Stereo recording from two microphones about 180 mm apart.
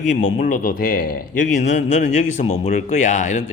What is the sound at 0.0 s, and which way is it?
A man's voice, 45° left (ahead or behind).